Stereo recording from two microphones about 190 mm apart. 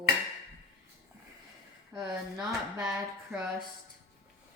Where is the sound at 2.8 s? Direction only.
10° right (ahead or behind).